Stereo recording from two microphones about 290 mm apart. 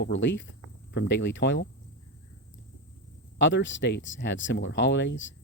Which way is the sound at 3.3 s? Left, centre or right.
Left.